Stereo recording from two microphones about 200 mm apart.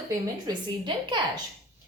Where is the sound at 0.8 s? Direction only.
20° right (ahead or behind).